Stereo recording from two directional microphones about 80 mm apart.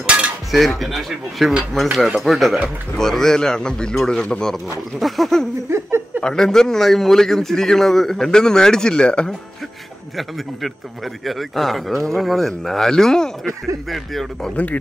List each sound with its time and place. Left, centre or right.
0.5 s a man's voice: centre
5.7 s a sound: right
6.2 s a man's voice: centre
11.2 s a man's voice: centre
14.5 s speech: centre